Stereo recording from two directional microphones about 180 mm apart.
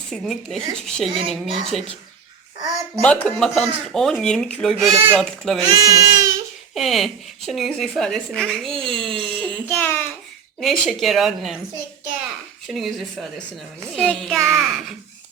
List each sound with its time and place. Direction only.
0.1 s speech: centre (ahead or behind)
3.0 s speech: 5° left (ahead or behind)
5.7 s speech: 20° right (ahead or behind)
6.7 s speech: centre (ahead or behind)
10.6 s speech: centre (ahead or behind)
12.6 s speech: centre (ahead or behind)